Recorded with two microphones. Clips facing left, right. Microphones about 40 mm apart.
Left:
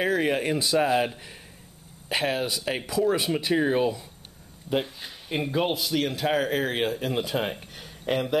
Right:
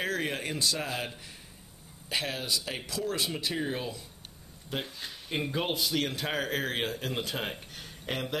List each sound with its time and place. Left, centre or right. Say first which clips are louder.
0.0 s speech: left 8 dB; centre; by 4.0 s left
4.6 s speech: left 8 dB; centre